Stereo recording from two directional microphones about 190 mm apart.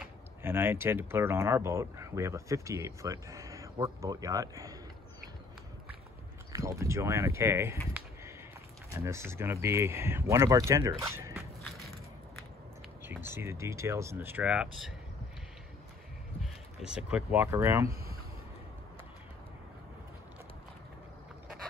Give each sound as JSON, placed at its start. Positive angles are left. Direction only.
{"t": 0.4, "sound": "speech", "side_deg": -10}
{"t": 6.5, "sound": "speech", "side_deg": -15}
{"t": 8.9, "sound": "speech", "side_deg": -15}
{"t": 13.0, "sound": "speech", "side_deg": -10}
{"t": 16.8, "sound": "speech", "side_deg": -5}